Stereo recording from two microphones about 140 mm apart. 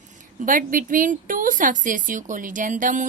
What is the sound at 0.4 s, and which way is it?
Speech, 75° right (ahead or behind).